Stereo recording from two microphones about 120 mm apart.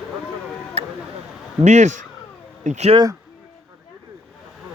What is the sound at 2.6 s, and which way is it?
Speech, 75° right (ahead or behind).